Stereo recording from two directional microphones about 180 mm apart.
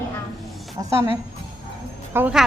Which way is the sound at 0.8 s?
15° right (ahead or behind).